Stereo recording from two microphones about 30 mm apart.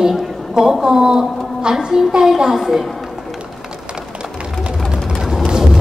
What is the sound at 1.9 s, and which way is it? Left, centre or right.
Speech, centre.